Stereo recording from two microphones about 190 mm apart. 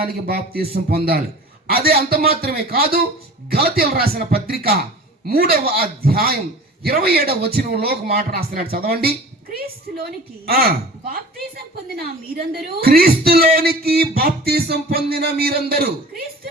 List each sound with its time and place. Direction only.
0.0 s a woman's voice: 55° right (ahead or behind)